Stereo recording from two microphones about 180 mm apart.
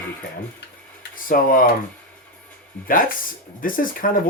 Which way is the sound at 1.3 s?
50° left (ahead or behind).